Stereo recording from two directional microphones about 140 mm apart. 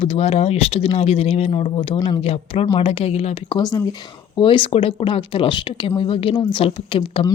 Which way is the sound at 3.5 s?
30° left (ahead or behind).